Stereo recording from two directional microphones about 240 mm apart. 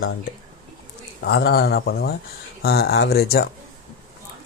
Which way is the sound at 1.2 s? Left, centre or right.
Left.